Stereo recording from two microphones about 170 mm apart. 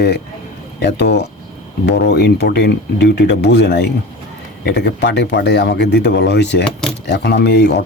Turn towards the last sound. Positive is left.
turn(degrees=80)